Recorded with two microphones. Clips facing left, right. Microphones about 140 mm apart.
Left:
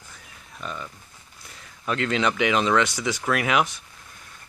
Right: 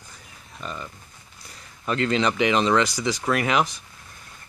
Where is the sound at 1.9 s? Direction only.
Centre (ahead or behind).